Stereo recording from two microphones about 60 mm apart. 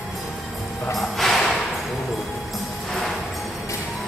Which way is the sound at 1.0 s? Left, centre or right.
Centre.